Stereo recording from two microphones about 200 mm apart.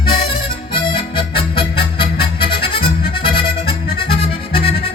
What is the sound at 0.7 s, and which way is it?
Music, 25° left (ahead or behind).